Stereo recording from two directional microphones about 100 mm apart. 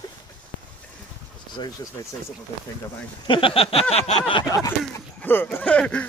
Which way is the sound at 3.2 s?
60° left (ahead or behind).